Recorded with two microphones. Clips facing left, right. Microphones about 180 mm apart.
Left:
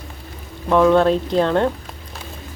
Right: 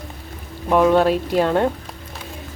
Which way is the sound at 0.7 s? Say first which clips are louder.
Left 1 dB; 10° right (ahead or behind).